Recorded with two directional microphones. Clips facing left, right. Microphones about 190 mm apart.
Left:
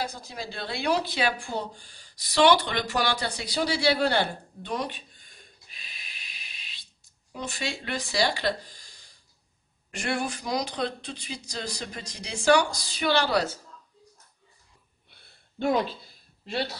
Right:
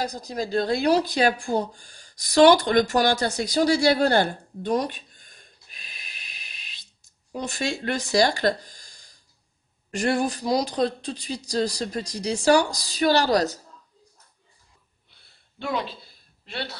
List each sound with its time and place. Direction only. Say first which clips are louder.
0.0 s speech: right 6 dB; 40° right (ahead or behind)